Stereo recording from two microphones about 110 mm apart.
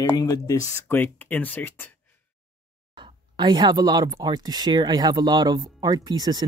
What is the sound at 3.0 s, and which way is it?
Speech, 45° right (ahead or behind).